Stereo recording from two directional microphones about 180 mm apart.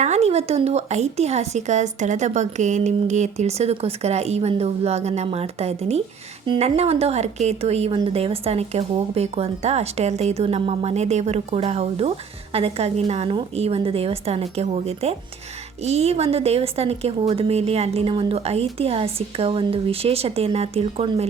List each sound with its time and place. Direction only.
0.0 s speech: 35° right (ahead or behind)